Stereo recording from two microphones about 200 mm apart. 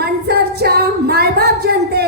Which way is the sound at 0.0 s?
50° right (ahead or behind).